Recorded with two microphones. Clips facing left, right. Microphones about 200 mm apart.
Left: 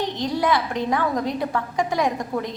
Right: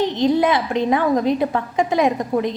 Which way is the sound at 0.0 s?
20° right (ahead or behind).